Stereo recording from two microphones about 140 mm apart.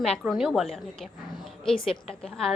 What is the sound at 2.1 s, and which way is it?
Speech, 5° left (ahead or behind).